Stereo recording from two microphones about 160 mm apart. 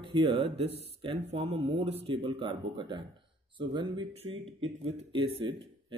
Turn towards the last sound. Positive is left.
turn(degrees=-35)  # may be behind; listen again after turning